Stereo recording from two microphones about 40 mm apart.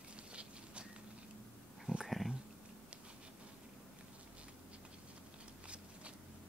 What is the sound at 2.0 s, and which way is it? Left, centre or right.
Cat, centre.